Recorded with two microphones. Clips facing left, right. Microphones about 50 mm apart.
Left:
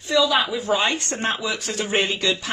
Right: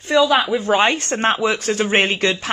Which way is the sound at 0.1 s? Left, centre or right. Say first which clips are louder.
Right 4 dB; right.